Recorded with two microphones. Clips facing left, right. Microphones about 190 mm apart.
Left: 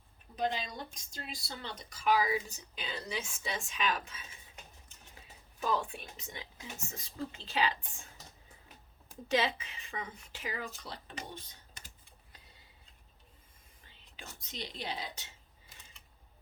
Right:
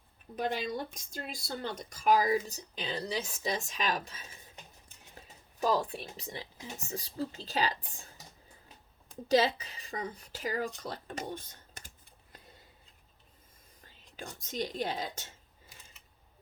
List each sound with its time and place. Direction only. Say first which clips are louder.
0.3 s a woman's voice: right 2 dB; 55° right (ahead or behind); by 8.0 s 35° right (ahead or behind)
9.3 s a woman's voice: right 5 dB; 40° right (ahead or behind)
14.2 s speech: right 9 dB; 45° right (ahead or behind)